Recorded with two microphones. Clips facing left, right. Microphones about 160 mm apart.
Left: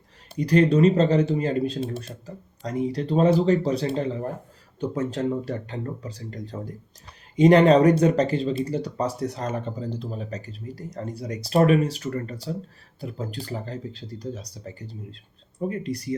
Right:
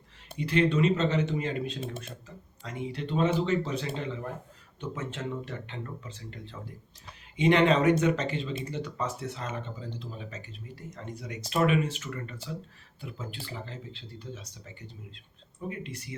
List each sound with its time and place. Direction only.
0.3 s speech: 40° left (ahead or behind)